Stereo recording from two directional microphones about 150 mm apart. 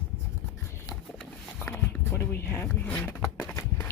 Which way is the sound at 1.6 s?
15° left (ahead or behind).